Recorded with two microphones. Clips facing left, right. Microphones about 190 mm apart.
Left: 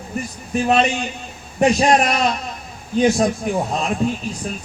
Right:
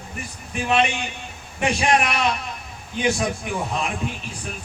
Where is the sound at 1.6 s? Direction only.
40° left (ahead or behind).